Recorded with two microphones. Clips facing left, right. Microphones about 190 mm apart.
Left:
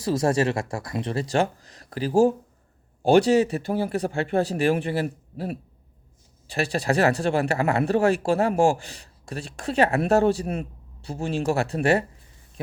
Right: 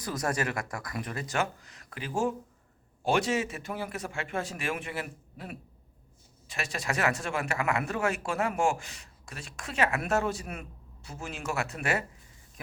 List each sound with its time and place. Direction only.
0.0 s speech: 25° left (ahead or behind)